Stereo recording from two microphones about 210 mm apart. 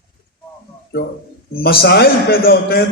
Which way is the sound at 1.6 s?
45° left (ahead or behind).